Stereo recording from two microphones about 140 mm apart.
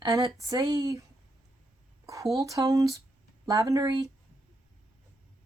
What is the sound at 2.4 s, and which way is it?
Speech, 25° right (ahead or behind).